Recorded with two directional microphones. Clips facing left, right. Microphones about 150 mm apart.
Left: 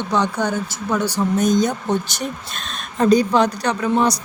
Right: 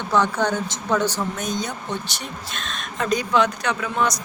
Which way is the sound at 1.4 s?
45° left (ahead or behind).